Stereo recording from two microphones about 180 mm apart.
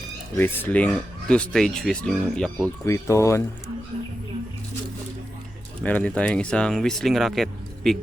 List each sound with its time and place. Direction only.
0.3 s speech: 10° left (ahead or behind)
2.8 s speech: 15° left (ahead or behind)
5.8 s speech: 5° left (ahead or behind)